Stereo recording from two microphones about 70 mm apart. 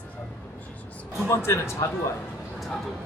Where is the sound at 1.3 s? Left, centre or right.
Left.